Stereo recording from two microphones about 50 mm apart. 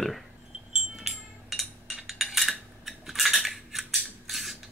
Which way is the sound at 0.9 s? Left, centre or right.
Centre.